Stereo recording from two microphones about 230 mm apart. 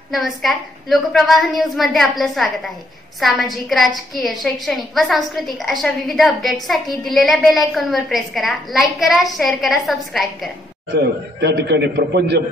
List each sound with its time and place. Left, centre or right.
0.1 s a woman's voice: centre
11.0 s a man's voice: right